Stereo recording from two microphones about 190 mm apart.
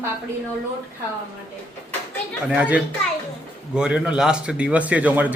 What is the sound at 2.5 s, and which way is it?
A man's voice, 5° right (ahead or behind).